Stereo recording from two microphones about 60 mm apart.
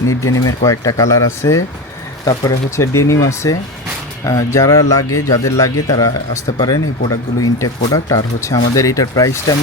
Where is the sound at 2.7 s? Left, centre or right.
Left.